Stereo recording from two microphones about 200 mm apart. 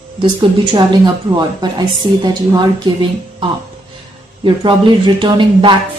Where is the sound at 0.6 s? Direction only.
25° right (ahead or behind).